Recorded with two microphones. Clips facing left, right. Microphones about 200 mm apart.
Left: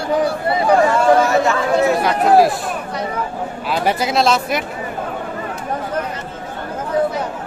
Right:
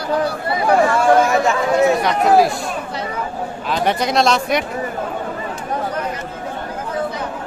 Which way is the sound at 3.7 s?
5° left (ahead or behind).